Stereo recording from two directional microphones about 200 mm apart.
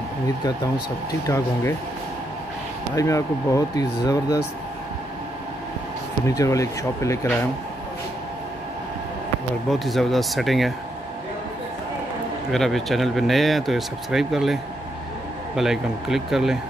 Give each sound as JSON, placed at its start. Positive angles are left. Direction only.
{"t": 1.2, "sound": "speech", "side_deg": 15}
{"t": 3.0, "sound": "speech", "side_deg": 15}
{"t": 6.2, "sound": "speech", "side_deg": 15}
{"t": 9.7, "sound": "speech", "side_deg": 0}
{"t": 12.4, "sound": "speech", "side_deg": 0}